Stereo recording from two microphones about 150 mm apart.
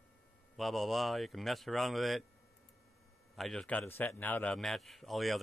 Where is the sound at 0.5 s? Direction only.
Centre (ahead or behind).